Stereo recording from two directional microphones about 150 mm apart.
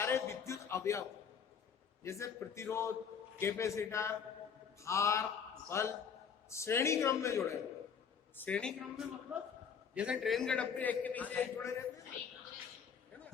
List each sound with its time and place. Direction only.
0.0 s a man's voice: 15° left (ahead or behind)
2.0 s a man's voice: 20° left (ahead or behind)
8.4 s a man's voice: 10° left (ahead or behind)
9.3 s a man's voice: 10° right (ahead or behind); by 11.9 s 15° left (ahead or behind)